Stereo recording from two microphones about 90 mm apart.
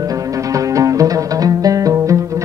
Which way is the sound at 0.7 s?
40° right (ahead or behind).